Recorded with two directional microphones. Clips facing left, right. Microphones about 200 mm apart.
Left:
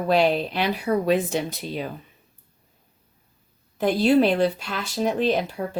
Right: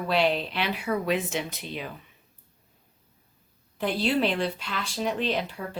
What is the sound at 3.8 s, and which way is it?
A woman's voice, 45° left (ahead or behind).